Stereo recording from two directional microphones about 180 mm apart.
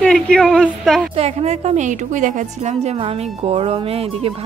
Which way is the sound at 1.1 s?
35° right (ahead or behind).